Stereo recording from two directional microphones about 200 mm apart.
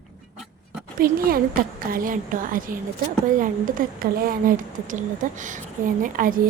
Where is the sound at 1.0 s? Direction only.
45° right (ahead or behind).